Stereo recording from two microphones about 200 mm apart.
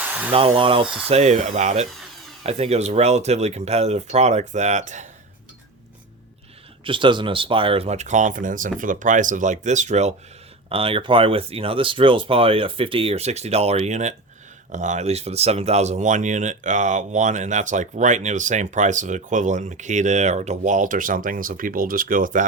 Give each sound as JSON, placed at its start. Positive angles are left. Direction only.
{"t": 0.0, "sound": "a sound", "side_deg": -10}
{"t": 0.3, "sound": "speech", "side_deg": -25}
{"t": 6.8, "sound": "speech", "side_deg": -25}